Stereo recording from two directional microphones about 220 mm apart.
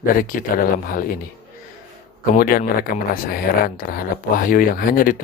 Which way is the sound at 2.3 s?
40° left (ahead or behind).